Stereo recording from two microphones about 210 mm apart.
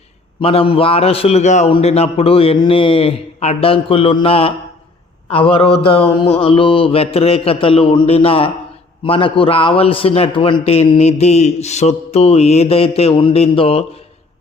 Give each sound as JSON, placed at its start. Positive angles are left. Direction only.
{"t": 0.4, "sound": "a man's voice", "side_deg": 25}